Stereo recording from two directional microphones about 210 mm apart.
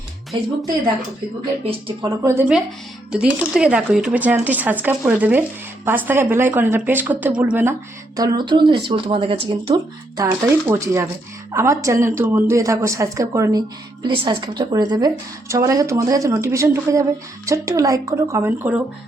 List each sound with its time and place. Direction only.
1.6 s a woman's voice: 20° right (ahead or behind)
10.7 s a woman's voice: 10° right (ahead or behind)